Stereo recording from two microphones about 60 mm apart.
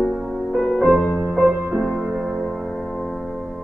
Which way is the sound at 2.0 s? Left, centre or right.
Centre.